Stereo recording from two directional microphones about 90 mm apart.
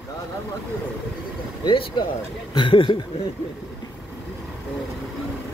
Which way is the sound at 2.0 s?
65° left (ahead or behind).